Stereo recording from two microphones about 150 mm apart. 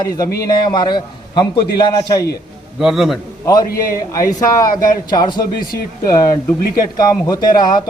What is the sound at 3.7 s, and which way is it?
A man's voice, 20° left (ahead or behind).